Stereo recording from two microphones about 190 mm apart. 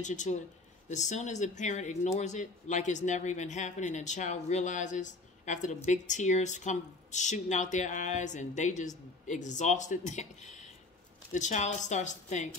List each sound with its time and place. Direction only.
0.0 s speech: 40° left (ahead or behind)